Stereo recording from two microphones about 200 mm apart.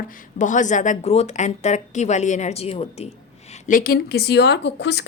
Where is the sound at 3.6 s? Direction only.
45° left (ahead or behind); by 5.0 s 60° left (ahead or behind).